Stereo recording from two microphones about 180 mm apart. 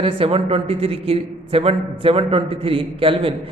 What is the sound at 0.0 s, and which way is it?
A man's voice, 30° right (ahead or behind).